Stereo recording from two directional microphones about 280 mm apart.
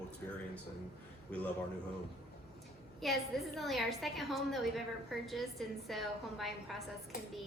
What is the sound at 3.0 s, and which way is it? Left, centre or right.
A woman's voice, centre.